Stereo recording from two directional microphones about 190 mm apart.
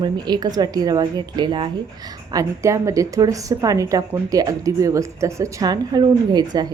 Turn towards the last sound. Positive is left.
turn(degrees=-20)  # may be behind; listen again after turning